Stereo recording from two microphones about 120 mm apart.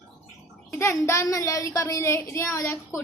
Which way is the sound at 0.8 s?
25° left (ahead or behind).